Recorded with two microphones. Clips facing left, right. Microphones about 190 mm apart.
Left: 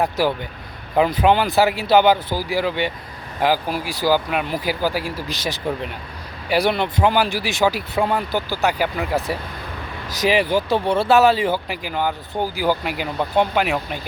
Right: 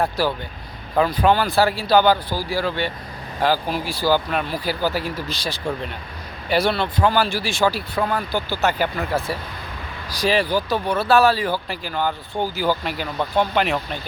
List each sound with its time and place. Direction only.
0.0 s speech: 20° left (ahead or behind)